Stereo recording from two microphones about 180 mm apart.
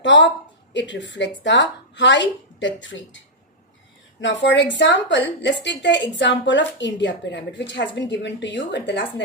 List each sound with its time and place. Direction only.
0.0 s a woman's voice: 85° left
4.2 s a woman's voice: 85° left